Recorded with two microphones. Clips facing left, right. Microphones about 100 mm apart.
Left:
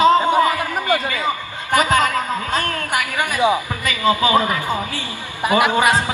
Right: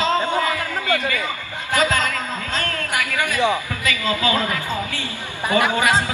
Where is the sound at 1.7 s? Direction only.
15° left (ahead or behind).